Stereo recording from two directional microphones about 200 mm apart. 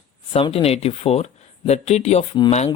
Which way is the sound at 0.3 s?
30° left (ahead or behind).